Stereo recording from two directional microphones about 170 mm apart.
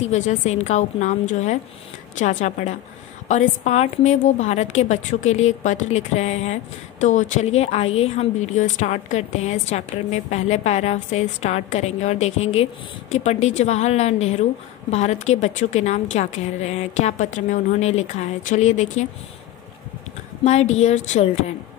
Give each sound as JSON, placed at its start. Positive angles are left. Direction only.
{"t": 0.0, "sound": "a woman's voice", "side_deg": 40}
{"t": 20.4, "sound": "a woman's voice", "side_deg": 40}